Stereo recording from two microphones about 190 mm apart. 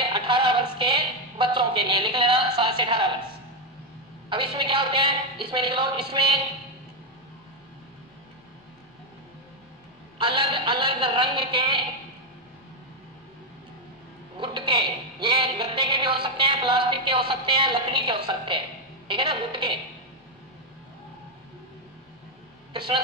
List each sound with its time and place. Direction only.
0.0 s music: 25° right (ahead or behind)
4.3 s music: 25° right (ahead or behind)
10.1 s music: 25° right (ahead or behind)
14.4 s a woman's voice: 25° right (ahead or behind)
15.2 s music: 25° right (ahead or behind)
22.7 s a sound: 25° right (ahead or behind)